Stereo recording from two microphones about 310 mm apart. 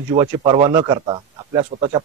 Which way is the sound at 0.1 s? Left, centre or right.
Centre.